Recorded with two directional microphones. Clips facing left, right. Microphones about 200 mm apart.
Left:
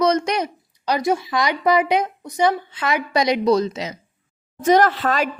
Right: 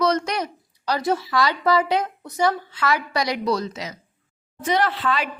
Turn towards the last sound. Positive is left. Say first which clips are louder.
# left 5 dB
turn(degrees=45)  # may be behind; listen again after turning